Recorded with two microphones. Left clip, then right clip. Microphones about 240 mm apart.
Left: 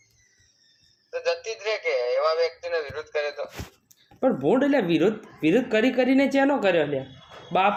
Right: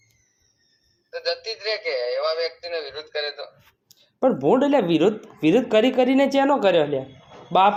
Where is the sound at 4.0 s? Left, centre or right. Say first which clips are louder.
Right 3 dB; centre.